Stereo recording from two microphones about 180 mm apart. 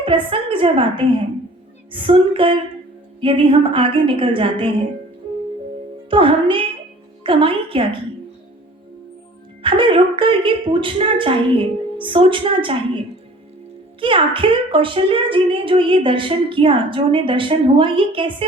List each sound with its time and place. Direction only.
0.0 s a woman's voice: 30° right (ahead or behind)
6.1 s a woman's voice: 30° right (ahead or behind)
9.6 s a woman's voice: 30° right (ahead or behind)
14.0 s a woman's voice: 30° right (ahead or behind)